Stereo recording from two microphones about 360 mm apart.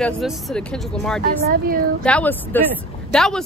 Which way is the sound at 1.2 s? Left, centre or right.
Right.